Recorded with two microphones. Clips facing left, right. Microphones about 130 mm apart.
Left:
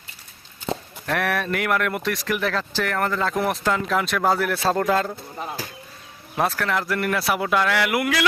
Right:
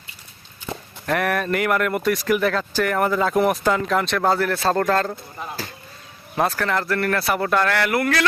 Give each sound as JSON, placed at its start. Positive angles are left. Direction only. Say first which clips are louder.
{"t": 1.0, "sound": "speech", "louder": "right 2 dB", "side_deg": 0}
{"t": 6.3, "sound": "speech", "louder": "right 1 dB", "side_deg": 0}